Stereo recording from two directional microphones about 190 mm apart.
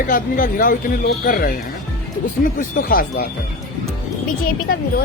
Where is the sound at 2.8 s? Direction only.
50° left (ahead or behind).